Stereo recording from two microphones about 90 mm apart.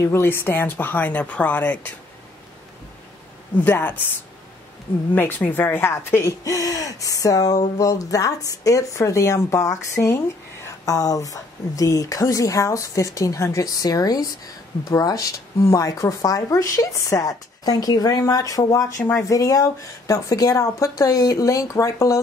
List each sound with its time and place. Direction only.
0.1 s speech: 25° left (ahead or behind)
3.6 s speech: 20° left (ahead or behind)
5.1 s speech: 20° left (ahead or behind)
6.4 s speech: 40° left (ahead or behind)